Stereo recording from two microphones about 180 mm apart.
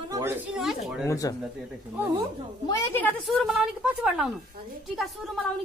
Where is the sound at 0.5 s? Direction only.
Centre (ahead or behind).